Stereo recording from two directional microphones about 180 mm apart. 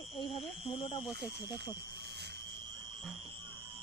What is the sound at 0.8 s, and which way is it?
Speech, 25° left (ahead or behind).